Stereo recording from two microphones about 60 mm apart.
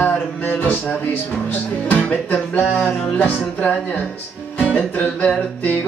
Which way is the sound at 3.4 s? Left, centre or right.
Left.